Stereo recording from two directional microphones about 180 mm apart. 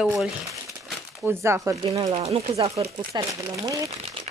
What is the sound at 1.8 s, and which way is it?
Speech, 30° right (ahead or behind).